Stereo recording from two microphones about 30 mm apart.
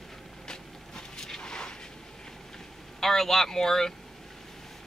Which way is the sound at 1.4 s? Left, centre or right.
Left.